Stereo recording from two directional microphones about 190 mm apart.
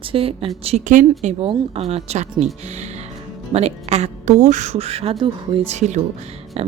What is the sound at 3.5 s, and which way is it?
A woman's voice, 35° right (ahead or behind).